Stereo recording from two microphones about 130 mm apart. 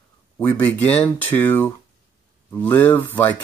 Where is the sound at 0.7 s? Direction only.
15° left (ahead or behind).